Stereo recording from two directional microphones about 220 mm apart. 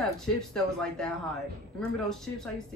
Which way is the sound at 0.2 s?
Centre (ahead or behind).